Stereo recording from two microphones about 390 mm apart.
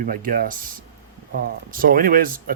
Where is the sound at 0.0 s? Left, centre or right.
Right.